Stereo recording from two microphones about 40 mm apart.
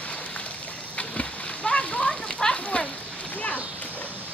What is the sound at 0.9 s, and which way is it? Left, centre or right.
Splash, left.